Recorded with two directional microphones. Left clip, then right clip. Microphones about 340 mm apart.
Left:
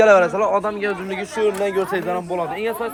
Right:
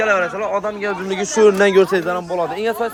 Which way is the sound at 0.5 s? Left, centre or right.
Centre.